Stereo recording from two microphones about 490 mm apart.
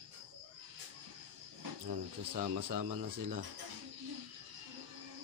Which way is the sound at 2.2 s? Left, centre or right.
Right.